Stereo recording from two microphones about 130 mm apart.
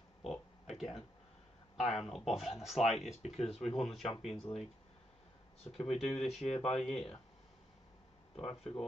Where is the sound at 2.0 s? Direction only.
Centre (ahead or behind).